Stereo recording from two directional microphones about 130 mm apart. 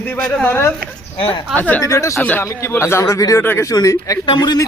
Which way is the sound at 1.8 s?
25° left (ahead or behind).